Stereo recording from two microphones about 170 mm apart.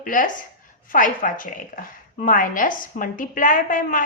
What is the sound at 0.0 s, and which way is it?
A woman's voice, 50° left (ahead or behind).